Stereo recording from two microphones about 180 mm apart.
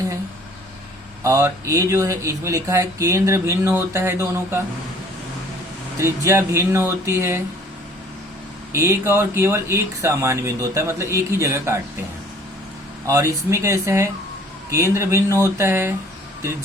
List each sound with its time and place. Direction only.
1.2 s speech: 15° right (ahead or behind)
6.0 s speech: 15° right (ahead or behind)
8.7 s speech: 15° right (ahead or behind)
13.1 s speech: 15° right (ahead or behind)